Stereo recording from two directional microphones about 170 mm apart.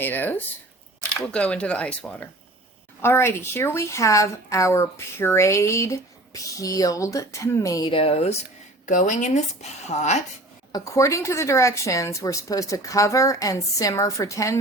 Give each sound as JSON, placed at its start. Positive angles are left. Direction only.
{"t": 0.0, "sound": "a woman's voice", "side_deg": 10}
{"t": 8.9, "sound": "speech", "side_deg": 50}
{"t": 10.7, "sound": "a woman's voice", "side_deg": 20}